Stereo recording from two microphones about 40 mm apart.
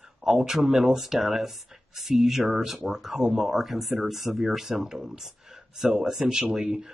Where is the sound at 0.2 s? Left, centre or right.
Centre.